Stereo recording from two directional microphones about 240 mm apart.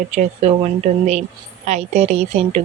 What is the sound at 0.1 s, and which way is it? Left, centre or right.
Speech, right.